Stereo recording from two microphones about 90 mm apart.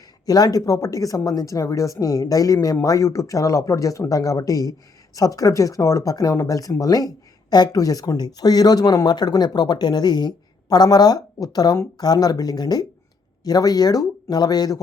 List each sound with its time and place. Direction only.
0.3 s speech: 45° left (ahead or behind)